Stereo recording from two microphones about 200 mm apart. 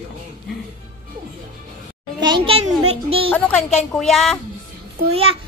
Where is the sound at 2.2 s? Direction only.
25° right (ahead or behind).